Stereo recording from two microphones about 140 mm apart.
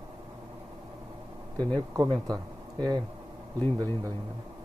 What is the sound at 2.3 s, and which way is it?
Speech, 30° right (ahead or behind).